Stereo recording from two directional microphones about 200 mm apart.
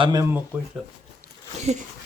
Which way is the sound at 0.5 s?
5° right (ahead or behind).